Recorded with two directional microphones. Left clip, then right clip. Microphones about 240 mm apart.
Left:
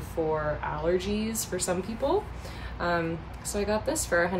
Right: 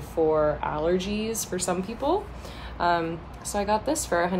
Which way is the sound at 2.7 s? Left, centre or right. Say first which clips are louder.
Right 4 dB; centre.